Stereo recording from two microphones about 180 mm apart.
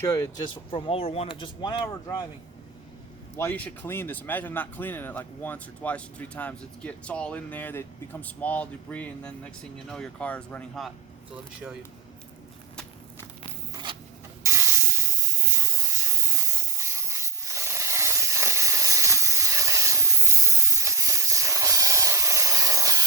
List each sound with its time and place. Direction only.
0.0 s speech: 15° left (ahead or behind)
3.3 s speech: 10° left (ahead or behind)
13.9 s rub: 30° right (ahead or behind)
14.4 s hiss: 15° right (ahead or behind)